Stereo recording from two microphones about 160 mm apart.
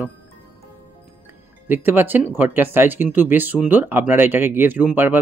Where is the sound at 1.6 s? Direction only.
10° right (ahead or behind).